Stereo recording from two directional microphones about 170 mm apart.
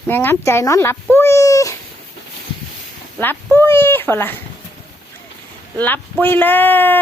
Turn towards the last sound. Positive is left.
turn(degrees=10)  # may be behind; listen again after turning